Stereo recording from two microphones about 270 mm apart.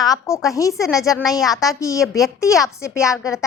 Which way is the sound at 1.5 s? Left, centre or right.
Centre.